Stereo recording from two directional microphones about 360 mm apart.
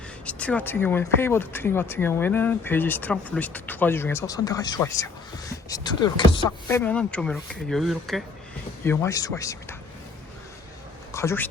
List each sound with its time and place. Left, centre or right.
0.3 s speech: centre
11.1 s speech: centre